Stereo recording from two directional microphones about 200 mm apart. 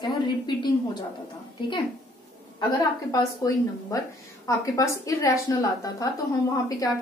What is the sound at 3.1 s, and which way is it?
A woman's voice, 15° left (ahead or behind).